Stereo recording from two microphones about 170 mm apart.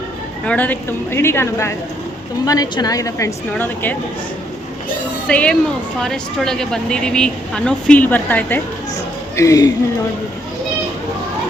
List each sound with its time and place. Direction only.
0.4 s a woman's voice: 10° left (ahead or behind)
5.3 s a woman's voice: 5° left (ahead or behind)